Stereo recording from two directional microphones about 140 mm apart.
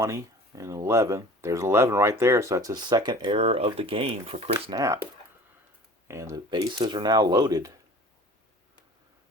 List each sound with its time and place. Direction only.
0.0 s speech: 20° right (ahead or behind); by 4.7 s 45° right (ahead or behind)
4.7 s speech: 20° right (ahead or behind)
6.1 s speech: 20° right (ahead or behind)